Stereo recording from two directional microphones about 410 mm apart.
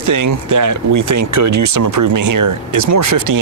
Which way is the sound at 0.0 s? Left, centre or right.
Right.